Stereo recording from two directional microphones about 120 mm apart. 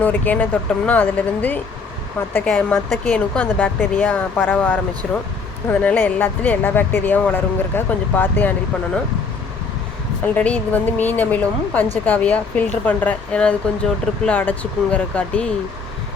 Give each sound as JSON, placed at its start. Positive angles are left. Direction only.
{"t": 0.0, "sound": "speech", "side_deg": 15}
{"t": 10.3, "sound": "speech", "side_deg": 10}